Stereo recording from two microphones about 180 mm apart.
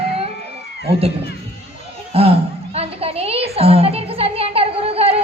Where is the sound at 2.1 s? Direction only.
35° right (ahead or behind).